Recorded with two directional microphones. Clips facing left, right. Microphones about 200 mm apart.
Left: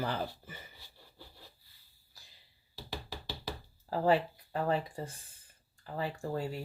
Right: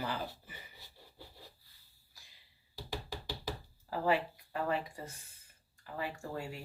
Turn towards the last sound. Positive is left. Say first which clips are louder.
# left 5 dB
turn(degrees=35)  # may be behind; listen again after turning